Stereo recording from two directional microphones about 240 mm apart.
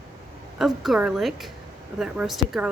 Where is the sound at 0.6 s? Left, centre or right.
Centre.